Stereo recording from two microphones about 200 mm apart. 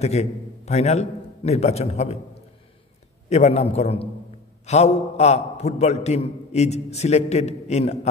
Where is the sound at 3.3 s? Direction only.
30° left (ahead or behind).